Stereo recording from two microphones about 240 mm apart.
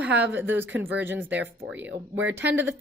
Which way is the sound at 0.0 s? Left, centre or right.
Centre.